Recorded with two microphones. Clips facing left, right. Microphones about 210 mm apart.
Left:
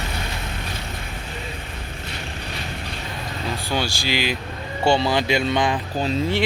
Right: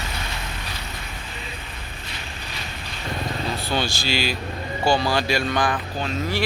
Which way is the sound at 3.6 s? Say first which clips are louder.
Left 2 dB; 10° left (ahead or behind).